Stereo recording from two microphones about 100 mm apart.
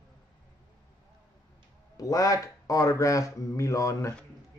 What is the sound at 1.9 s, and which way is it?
Speech, 35° left (ahead or behind).